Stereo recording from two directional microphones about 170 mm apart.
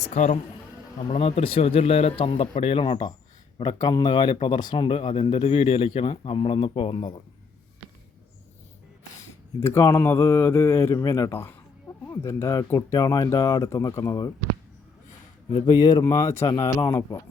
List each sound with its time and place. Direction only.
0.0 s a man's voice: 45° left (ahead or behind)
1.1 s speech: 35° left (ahead or behind)
9.6 s speech: 15° left (ahead or behind)
15.5 s speech: 25° left (ahead or behind)